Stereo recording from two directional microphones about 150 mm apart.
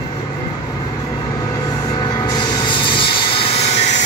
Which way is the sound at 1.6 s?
25° left (ahead or behind).